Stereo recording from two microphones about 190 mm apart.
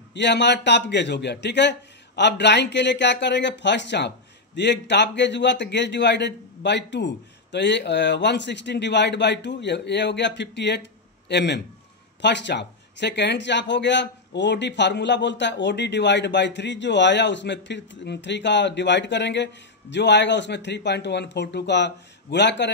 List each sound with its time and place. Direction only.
0.1 s a man's voice: 65° left (ahead or behind)